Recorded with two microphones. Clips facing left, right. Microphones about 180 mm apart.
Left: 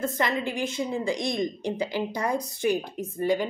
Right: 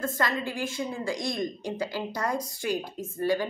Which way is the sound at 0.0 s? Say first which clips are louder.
Left 2 dB; 20° left (ahead or behind).